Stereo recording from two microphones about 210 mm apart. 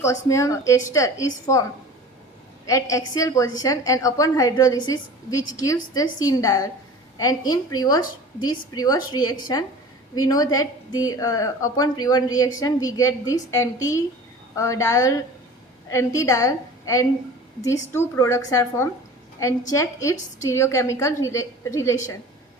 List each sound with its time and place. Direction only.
0.0 s a woman's voice: 15° left (ahead or behind)
2.6 s a woman's voice: 15° left (ahead or behind)